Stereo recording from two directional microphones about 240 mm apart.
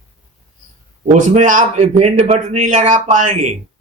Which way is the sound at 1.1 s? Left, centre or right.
Right.